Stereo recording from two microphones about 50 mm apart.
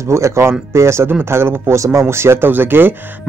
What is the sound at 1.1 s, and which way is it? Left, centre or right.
Speech, right.